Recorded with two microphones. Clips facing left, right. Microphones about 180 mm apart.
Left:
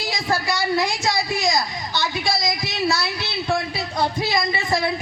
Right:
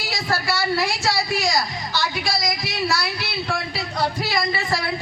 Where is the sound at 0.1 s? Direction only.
20° left (ahead or behind).